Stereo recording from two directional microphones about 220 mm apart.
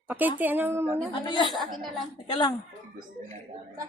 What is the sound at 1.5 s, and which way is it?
Speech, centre (ahead or behind).